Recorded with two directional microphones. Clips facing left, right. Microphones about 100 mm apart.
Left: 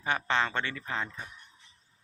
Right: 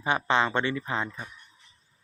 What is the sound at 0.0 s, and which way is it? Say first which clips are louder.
Speech: right 4 dB; 15° right (ahead or behind).